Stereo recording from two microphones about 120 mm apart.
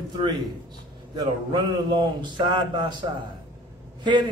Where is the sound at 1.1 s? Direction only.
35° right (ahead or behind).